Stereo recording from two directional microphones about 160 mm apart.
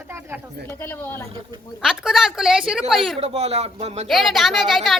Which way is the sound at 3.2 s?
40° right (ahead or behind).